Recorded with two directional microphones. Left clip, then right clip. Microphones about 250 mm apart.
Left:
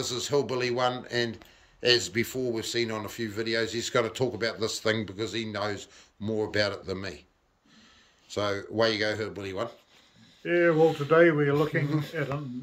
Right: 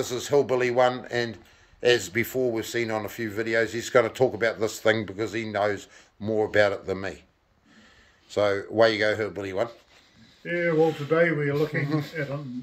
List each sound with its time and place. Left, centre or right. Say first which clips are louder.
0.0 s a man's voice: right 4 dB; centre
8.3 s a man's voice: right 6 dB; centre
11.9 s a man's voice: right 2 dB; centre